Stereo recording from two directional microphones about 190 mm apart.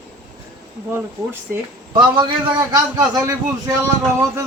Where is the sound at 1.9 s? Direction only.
25° right (ahead or behind).